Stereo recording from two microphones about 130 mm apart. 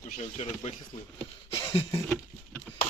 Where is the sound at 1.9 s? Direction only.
20° left (ahead or behind).